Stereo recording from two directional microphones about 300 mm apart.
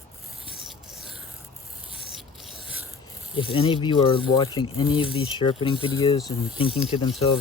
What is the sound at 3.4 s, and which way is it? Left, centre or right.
Speech, centre.